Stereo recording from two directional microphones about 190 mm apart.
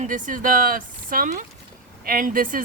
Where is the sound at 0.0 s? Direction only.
45° right (ahead or behind).